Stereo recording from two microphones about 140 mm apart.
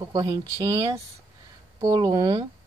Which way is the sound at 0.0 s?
25° right (ahead or behind).